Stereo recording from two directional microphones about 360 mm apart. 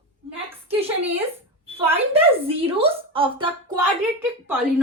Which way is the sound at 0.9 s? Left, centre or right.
Centre.